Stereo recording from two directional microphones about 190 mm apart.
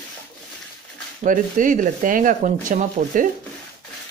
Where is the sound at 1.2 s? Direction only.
45° right (ahead or behind).